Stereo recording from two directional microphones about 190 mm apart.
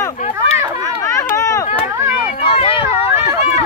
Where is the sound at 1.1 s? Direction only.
15° left (ahead or behind).